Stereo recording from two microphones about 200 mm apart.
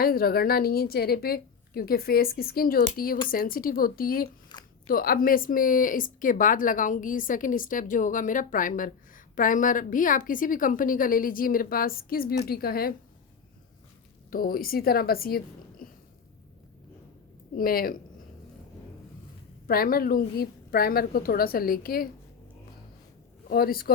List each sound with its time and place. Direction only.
0.0 s speech: 50° left (ahead or behind)
4.5 s a sound: 20° left (ahead or behind)
4.9 s speech: 45° left (ahead or behind)
14.3 s speech: 45° left (ahead or behind)
15.8 s a sound: 45° left (ahead or behind)
17.6 s speech: 45° left (ahead or behind)
19.6 s speech: 45° left (ahead or behind)
23.5 s speech: 50° left (ahead or behind)